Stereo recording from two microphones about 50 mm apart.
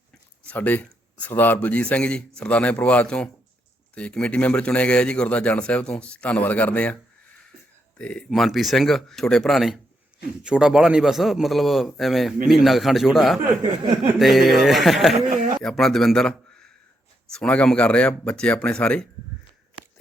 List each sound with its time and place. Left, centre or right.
0.5 s speech: left
1.6 s a man's voice: left
8.3 s a man's voice: centre
10.4 s a man's voice: centre
15.6 s a man's voice: centre